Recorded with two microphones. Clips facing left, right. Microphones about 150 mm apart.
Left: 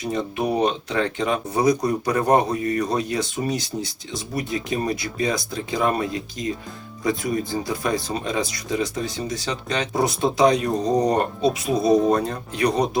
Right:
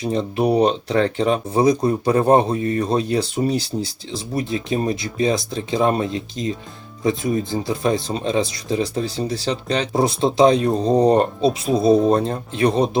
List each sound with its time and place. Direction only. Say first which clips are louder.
0.0 s speech: right 4 dB; 30° right (ahead or behind)